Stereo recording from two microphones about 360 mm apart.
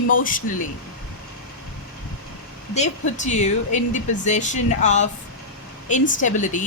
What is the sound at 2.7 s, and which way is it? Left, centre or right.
Speech, centre.